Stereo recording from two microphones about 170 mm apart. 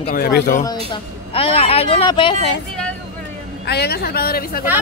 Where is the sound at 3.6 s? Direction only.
70° left (ahead or behind).